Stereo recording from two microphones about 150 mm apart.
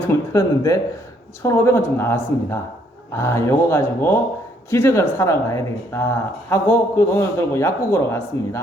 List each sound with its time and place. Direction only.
0.1 s speech: 20° left (ahead or behind)